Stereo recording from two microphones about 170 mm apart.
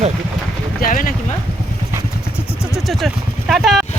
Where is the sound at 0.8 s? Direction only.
55° left (ahead or behind).